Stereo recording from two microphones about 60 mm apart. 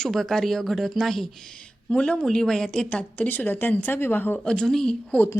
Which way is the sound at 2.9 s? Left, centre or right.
Left.